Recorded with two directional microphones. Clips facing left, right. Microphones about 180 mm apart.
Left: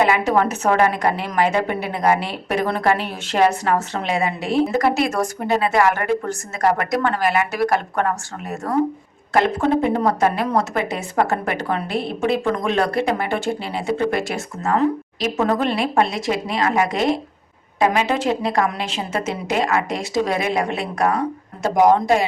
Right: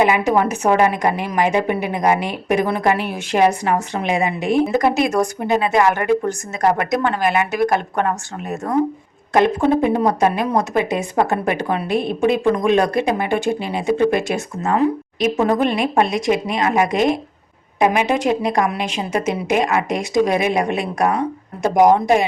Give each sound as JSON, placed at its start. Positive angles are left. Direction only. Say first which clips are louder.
{"t": 0.0, "sound": "speech", "louder": "right 1 dB", "side_deg": -15}